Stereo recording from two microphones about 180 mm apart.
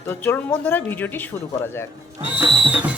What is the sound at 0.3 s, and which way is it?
Speech, 15° left (ahead or behind).